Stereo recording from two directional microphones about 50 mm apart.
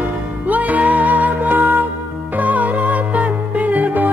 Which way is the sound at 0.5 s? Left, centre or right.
Right.